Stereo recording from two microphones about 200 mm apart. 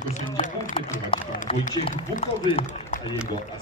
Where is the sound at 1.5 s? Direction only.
25° left (ahead or behind).